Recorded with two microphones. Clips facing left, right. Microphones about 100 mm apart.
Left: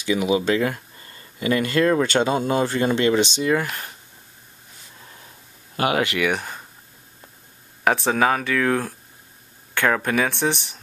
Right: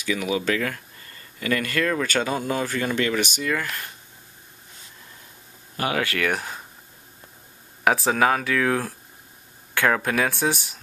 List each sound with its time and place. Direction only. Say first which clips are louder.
0.0 s speech: left 4 dB; 20° left (ahead or behind)
5.9 s speech: left 3 dB; 20° left (ahead or behind)
6.2 s speech: left 2 dB; centre (ahead or behind)
7.8 s speech: left 1 dB; centre (ahead or behind)